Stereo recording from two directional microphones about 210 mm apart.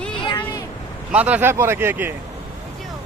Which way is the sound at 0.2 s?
20° left (ahead or behind).